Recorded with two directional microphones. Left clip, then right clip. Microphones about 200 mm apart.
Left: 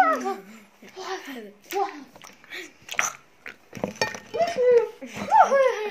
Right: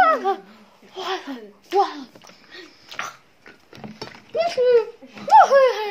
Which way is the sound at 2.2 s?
25° left (ahead or behind).